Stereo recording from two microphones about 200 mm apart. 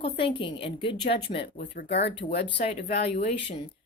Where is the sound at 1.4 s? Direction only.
45° left (ahead or behind).